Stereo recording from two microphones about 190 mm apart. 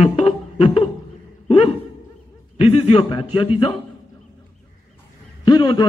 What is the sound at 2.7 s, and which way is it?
Speech, 30° left (ahead or behind).